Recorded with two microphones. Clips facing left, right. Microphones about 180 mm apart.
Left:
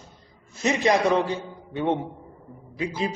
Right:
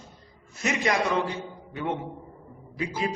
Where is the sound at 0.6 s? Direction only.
30° left (ahead or behind).